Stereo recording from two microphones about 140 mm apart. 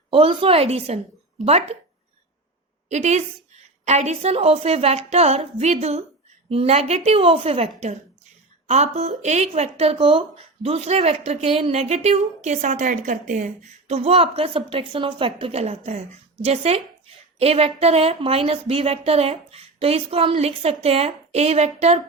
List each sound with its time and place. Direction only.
0.1 s speech: 40° right (ahead or behind)
2.9 s speech: 55° right (ahead or behind)